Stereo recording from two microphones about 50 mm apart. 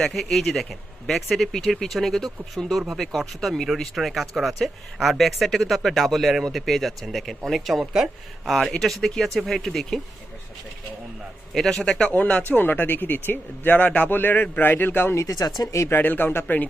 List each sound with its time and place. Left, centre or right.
0.0 s speech: centre
8.4 s speech: centre
11.5 s speech: centre
12.1 s speech: left
14.1 s speech: left